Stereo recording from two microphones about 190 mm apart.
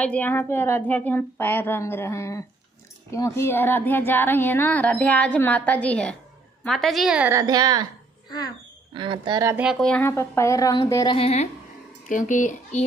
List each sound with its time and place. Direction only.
0.0 s a woman's voice: 10° left (ahead or behind); by 7.9 s 20° right (ahead or behind)
8.9 s speech: 25° right (ahead or behind)
9.7 s speech: 5° left (ahead or behind); by 11.4 s 30° left (ahead or behind)
12.1 s speech: 45° left (ahead or behind)